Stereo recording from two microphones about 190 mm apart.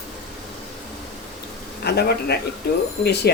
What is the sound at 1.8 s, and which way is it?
A woman's voice, 60° left (ahead or behind).